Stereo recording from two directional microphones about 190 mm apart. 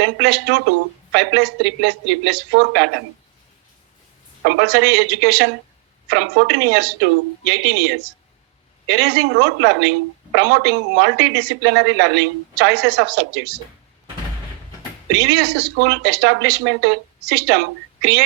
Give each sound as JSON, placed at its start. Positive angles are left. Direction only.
{"t": 0.0, "sound": "speech", "side_deg": -65}
{"t": 4.4, "sound": "speech", "side_deg": -65}
{"t": 15.1, "sound": "speech", "side_deg": -60}